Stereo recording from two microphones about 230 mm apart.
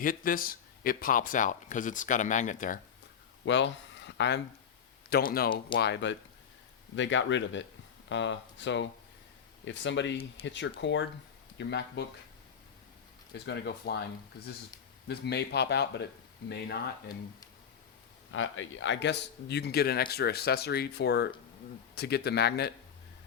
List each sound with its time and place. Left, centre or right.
0.0 s speech: left
3.4 s a sound: left
5.0 s a man's voice: left
13.3 s a man's voice: left
15.0 s a man's voice: left
18.3 s a man's voice: left